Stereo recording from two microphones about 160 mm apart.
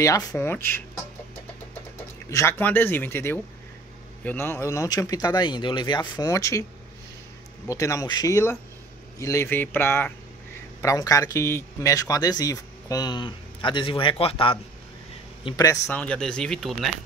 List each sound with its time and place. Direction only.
0.0 s speech: 20° left (ahead or behind)
2.2 s speech: 15° left (ahead or behind)
7.6 s speech: 20° left (ahead or behind); by 14.6 s 35° left (ahead or behind)
15.4 s speech: 20° left (ahead or behind)
16.0 s speech: 5° left (ahead or behind)